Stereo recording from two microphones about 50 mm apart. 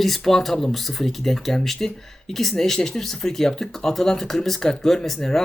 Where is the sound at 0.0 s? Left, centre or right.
Centre.